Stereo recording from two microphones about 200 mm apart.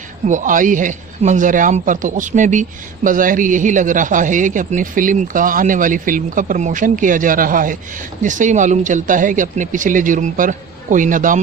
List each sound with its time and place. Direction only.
0.3 s a man's voice: 40° right (ahead or behind)